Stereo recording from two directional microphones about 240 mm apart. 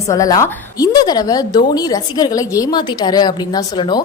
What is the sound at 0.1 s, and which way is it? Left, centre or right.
A woman's voice, centre.